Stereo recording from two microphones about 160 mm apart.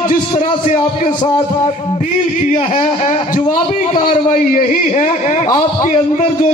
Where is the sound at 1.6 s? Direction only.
45° left (ahead or behind).